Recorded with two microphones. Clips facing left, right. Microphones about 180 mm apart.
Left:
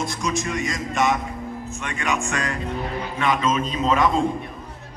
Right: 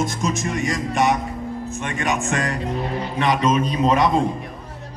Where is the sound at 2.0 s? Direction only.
40° right (ahead or behind).